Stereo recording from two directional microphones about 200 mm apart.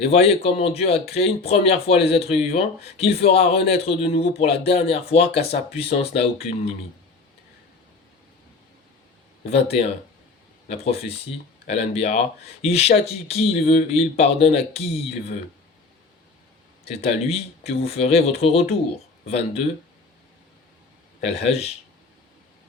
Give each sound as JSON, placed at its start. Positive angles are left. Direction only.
{"t": 0.0, "sound": "speech", "side_deg": 30}
{"t": 9.5, "sound": "speech", "side_deg": 30}
{"t": 16.8, "sound": "speech", "side_deg": 30}
{"t": 21.2, "sound": "speech", "side_deg": 35}